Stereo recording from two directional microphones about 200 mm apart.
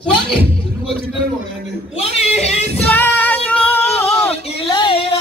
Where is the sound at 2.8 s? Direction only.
10° left (ahead or behind).